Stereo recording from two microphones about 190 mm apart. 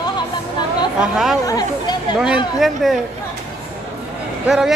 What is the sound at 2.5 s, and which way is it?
Speech, centre (ahead or behind).